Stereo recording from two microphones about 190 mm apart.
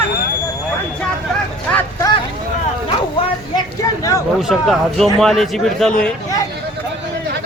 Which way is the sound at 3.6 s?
20° left (ahead or behind).